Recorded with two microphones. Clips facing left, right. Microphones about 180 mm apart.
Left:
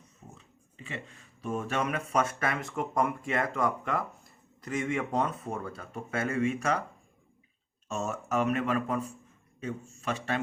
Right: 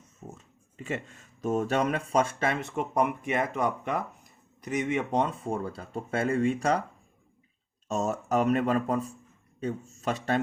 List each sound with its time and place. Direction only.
0.3 s speech: 45° right (ahead or behind)
7.9 s speech: 35° right (ahead or behind)